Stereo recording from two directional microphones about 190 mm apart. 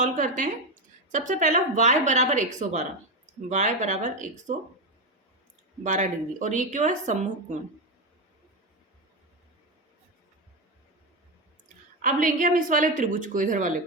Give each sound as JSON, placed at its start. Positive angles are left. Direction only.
{"t": 0.0, "sound": "speech", "side_deg": -45}
{"t": 5.8, "sound": "speech", "side_deg": -40}
{"t": 12.0, "sound": "a woman's voice", "side_deg": -45}